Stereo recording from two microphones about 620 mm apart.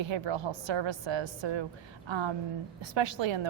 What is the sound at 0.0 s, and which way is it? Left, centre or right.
A woman's voice, right.